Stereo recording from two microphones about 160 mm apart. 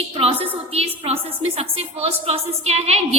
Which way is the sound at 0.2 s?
35° right (ahead or behind).